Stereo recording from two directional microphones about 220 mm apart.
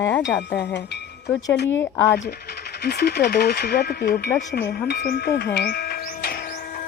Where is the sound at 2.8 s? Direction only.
45° left (ahead or behind).